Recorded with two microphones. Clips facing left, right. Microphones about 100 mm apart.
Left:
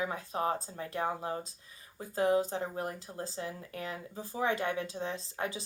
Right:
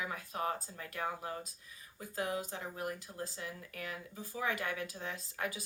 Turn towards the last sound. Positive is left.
turn(degrees=25)  # may be behind; listen again after turning